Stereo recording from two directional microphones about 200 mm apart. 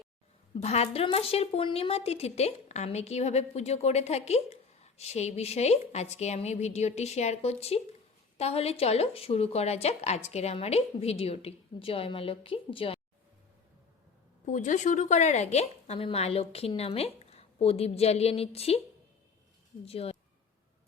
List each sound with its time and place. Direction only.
0.6 s a woman's voice: 30° left (ahead or behind)
14.5 s a woman's voice: 40° left (ahead or behind)
19.8 s speech: 30° left (ahead or behind)